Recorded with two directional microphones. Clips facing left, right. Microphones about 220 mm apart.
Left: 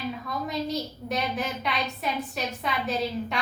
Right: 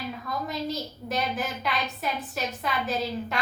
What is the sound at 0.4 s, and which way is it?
A woman's voice, centre (ahead or behind).